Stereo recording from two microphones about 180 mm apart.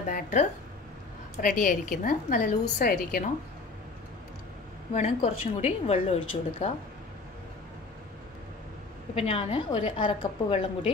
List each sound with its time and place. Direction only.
0.1 s a woman's voice: 45° left (ahead or behind)
4.9 s a woman's voice: 35° left (ahead or behind)
9.1 s a woman's voice: 30° left (ahead or behind)